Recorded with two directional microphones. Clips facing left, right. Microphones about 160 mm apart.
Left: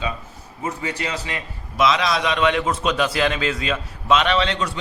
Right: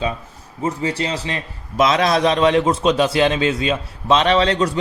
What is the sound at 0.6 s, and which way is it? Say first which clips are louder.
A man's voice: right 5 dB; 30° right (ahead or behind).